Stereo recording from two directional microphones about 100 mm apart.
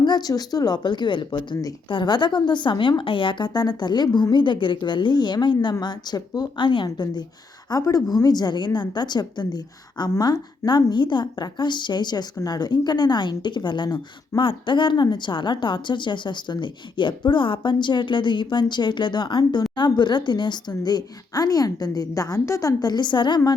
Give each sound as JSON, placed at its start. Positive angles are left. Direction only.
{"t": 0.0, "sound": "a woman's voice", "side_deg": 45}